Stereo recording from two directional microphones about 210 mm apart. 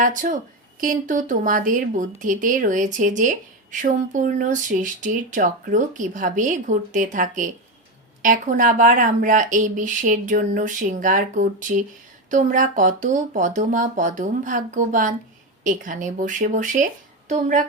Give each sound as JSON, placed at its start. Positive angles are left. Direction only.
{"t": 0.0, "sound": "a woman's voice", "side_deg": -40}